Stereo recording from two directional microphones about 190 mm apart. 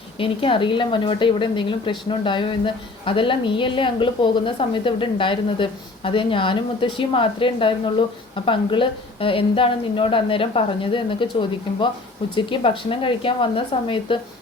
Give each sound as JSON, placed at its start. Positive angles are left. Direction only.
{"t": 0.2, "sound": "a woman's voice", "side_deg": 25}